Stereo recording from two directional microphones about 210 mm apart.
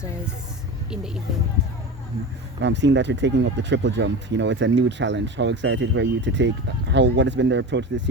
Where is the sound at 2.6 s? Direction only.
55° right (ahead or behind).